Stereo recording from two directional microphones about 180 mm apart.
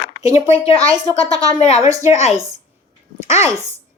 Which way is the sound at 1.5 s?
35° left (ahead or behind).